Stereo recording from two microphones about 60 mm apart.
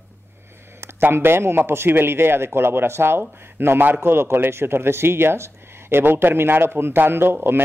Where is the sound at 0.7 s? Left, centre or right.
Right.